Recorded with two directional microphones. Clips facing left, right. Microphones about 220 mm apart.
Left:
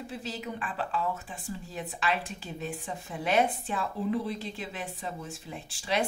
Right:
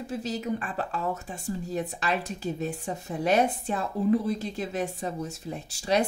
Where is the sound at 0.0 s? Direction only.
45° right (ahead or behind).